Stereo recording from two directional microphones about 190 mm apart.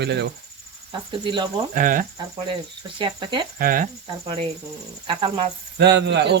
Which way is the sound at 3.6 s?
50° right (ahead or behind).